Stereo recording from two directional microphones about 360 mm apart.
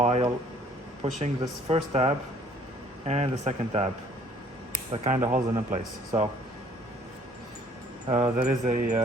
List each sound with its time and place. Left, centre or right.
0.0 s a sound: centre
1.2 s speech: centre
3.1 s mantra: centre
4.9 s mantra: right
5.3 s speech: centre
8.0 s mantra: centre